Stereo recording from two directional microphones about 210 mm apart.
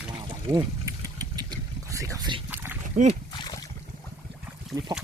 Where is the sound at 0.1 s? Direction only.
25° right (ahead or behind).